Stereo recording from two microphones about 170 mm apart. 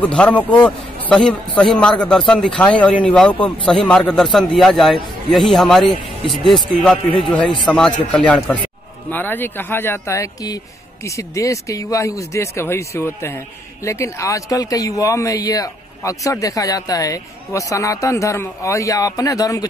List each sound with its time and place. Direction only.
0.0 s a man's voice: 5° left (ahead or behind)